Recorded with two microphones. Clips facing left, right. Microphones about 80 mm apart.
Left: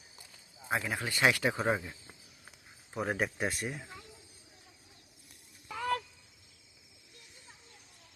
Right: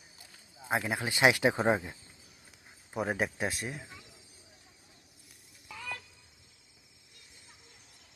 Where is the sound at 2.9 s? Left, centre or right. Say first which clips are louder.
Right 1 dB; centre.